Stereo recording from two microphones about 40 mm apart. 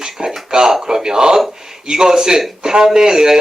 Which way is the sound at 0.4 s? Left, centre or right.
Centre.